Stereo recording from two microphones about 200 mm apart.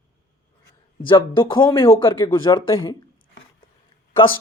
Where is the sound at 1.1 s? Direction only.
25° left (ahead or behind).